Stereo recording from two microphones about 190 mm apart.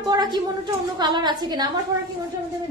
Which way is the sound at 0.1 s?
20° right (ahead or behind).